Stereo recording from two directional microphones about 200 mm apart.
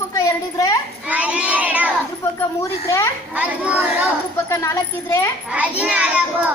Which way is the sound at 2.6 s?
15° left (ahead or behind).